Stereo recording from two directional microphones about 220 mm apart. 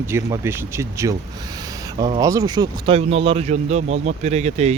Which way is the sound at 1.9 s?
25° right (ahead or behind).